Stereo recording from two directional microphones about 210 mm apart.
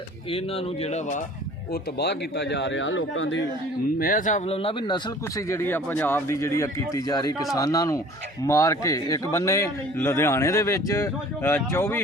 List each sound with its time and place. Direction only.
0.3 s speech: 30° left (ahead or behind)
1.7 s speech: 50° left (ahead or behind)
4.0 s a man's voice: 40° left (ahead or behind); by 11.9 s 10° left (ahead or behind)